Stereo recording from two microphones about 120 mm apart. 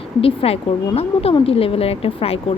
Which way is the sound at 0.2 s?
55° left (ahead or behind).